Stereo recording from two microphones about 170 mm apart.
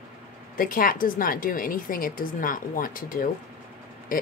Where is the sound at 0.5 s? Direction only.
55° left (ahead or behind).